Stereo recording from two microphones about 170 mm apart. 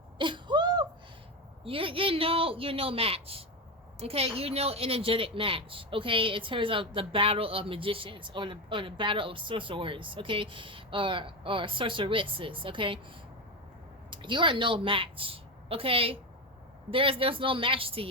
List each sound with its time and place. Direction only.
0.2 s a sound: 30° right (ahead or behind)
1.6 s a woman's voice: 30° right (ahead or behind)
14.1 s a woman's voice: 30° right (ahead or behind)